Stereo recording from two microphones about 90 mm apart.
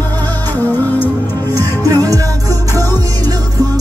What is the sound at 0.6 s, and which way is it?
Music, 20° left (ahead or behind).